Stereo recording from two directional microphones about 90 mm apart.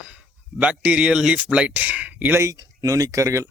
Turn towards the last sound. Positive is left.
turn(degrees=-35)  # may be behind; listen again after turning